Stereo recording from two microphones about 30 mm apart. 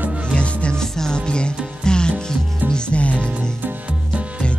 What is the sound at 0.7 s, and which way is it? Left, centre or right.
Music, centre.